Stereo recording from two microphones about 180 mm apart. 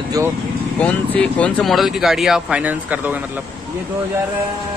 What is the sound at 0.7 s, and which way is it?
Speech, 10° left (ahead or behind).